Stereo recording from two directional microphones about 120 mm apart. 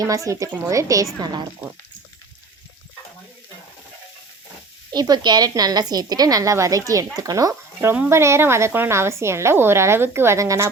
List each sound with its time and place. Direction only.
0.3 s a woman's voice: 25° right (ahead or behind)
1.2 s a woman's voice: 35° right (ahead or behind)
4.9 s a woman's voice: 35° right (ahead or behind)